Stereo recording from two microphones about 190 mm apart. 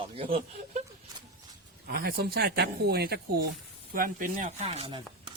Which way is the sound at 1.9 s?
55° right (ahead or behind).